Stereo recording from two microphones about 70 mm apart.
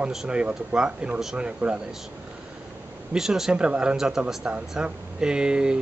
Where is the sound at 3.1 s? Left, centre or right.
Centre.